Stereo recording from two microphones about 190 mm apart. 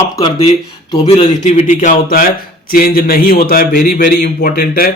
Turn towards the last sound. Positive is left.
turn(degrees=50)  # may be behind; listen again after turning